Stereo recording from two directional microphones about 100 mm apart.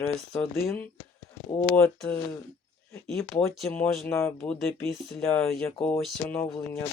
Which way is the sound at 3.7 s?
15° left (ahead or behind).